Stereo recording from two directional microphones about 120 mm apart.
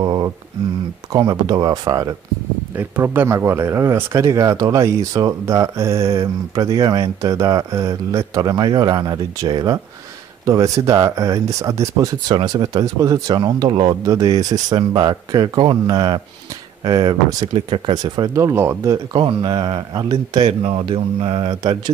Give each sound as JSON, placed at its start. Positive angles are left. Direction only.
{"t": 0.0, "sound": "a sound", "side_deg": -35}
{"t": 1.1, "sound": "speech", "side_deg": -30}
{"t": 2.8, "sound": "speech", "side_deg": -15}
{"t": 14.0, "sound": "speech", "side_deg": -30}
{"t": 17.6, "sound": "speech", "side_deg": -45}
{"t": 19.1, "sound": "speech", "side_deg": -45}